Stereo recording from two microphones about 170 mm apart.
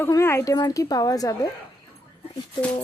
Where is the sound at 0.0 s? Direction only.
15° left (ahead or behind).